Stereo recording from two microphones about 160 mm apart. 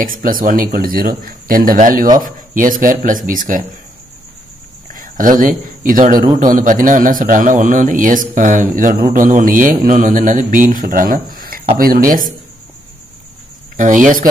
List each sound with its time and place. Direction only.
0.0 s a man's voice: 60° right (ahead or behind)
4.9 s a man's voice: 55° right (ahead or behind)
13.7 s a man's voice: 55° right (ahead or behind)